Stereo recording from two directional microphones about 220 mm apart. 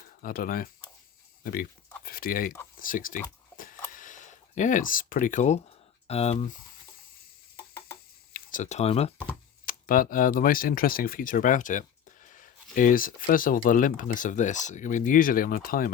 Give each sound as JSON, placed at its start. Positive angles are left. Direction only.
{"t": 0.2, "sound": "speech", "side_deg": 40}
{"t": 2.0, "sound": "speech", "side_deg": 40}
{"t": 3.9, "sound": "a sound", "side_deg": 35}
{"t": 8.3, "sound": "speech", "side_deg": 35}
{"t": 9.6, "sound": "speech", "side_deg": 40}